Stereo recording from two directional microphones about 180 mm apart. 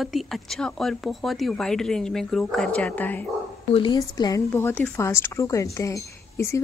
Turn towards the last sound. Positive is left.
turn(degrees=15)  # may be behind; listen again after turning